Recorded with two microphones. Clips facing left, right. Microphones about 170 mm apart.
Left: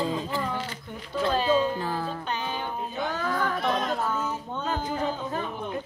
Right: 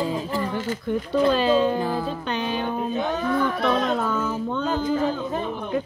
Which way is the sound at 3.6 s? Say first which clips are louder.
Right 5 dB; 70° right (ahead or behind).